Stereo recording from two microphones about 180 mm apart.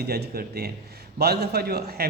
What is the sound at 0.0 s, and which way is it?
A man's voice, 60° right (ahead or behind).